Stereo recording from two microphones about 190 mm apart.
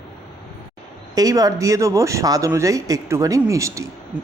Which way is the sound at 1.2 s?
20° right (ahead or behind).